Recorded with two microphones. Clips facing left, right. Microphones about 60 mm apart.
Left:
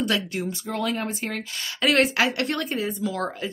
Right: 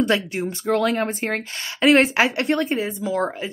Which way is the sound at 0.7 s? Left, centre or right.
Right.